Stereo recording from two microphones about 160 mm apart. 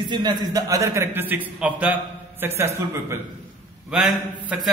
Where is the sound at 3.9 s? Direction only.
5° right (ahead or behind).